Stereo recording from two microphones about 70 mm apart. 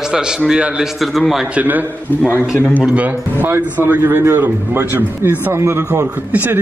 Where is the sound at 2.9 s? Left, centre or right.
Right.